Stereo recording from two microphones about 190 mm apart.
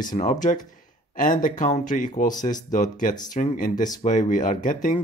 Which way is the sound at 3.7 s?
20° left (ahead or behind).